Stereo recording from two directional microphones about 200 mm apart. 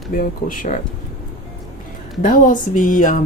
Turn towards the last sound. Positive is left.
turn(degrees=40)  # may be behind; listen again after turning